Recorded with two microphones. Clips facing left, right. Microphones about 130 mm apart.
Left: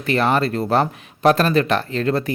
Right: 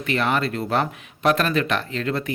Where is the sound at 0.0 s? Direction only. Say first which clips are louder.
Left 4 dB; 35° left (ahead or behind).